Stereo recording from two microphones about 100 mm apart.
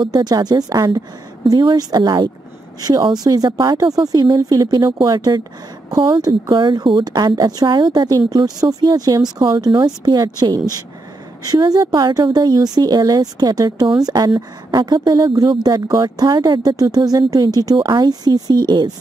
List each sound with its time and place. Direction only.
0.0 s speech: 45° right (ahead or behind)
9.4 s speech: 50° right (ahead or behind)
9.8 s speech: 40° right (ahead or behind)